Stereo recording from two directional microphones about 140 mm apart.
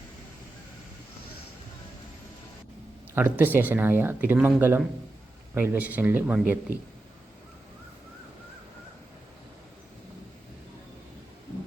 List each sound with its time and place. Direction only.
3.2 s speech: 15° right (ahead or behind)